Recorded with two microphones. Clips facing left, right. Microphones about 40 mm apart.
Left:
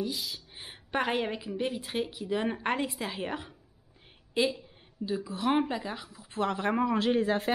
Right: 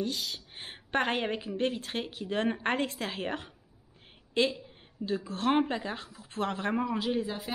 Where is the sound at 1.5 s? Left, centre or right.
Centre.